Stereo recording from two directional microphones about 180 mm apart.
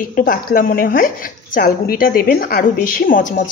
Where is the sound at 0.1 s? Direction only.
50° left (ahead or behind).